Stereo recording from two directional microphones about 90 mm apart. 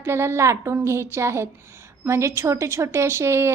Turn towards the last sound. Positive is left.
turn(degrees=-30)  # may be behind; listen again after turning